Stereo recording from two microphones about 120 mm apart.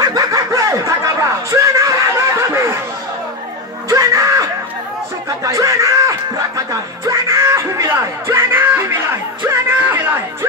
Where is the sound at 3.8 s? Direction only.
30° right (ahead or behind).